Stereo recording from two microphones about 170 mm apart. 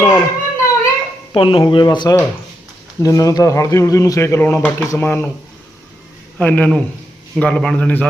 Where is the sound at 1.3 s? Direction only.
30° left (ahead or behind); by 5.2 s 15° left (ahead or behind).